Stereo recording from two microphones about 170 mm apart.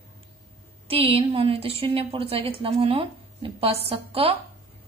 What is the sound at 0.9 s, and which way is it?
A woman's voice, 35° right (ahead or behind).